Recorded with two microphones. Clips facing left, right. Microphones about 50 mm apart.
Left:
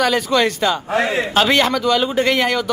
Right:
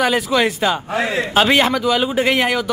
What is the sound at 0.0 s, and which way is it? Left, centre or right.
A man's voice, centre.